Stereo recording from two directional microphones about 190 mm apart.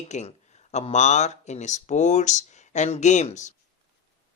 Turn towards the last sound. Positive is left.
turn(degrees=40)  # may be behind; listen again after turning